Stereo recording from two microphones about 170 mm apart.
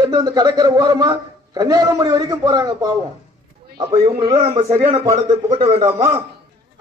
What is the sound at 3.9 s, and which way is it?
Speech, 30° right (ahead or behind).